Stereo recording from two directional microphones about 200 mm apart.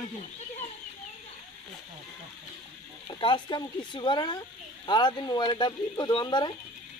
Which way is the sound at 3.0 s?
25° left (ahead or behind).